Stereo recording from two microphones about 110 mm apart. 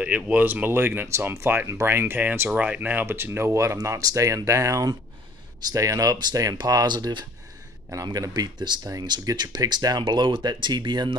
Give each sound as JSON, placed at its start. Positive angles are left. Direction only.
{"t": 0.0, "sound": "speech", "side_deg": -15}